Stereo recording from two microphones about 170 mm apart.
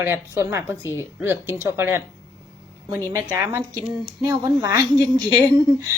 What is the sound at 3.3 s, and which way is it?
A woman's voice, 15° right (ahead or behind).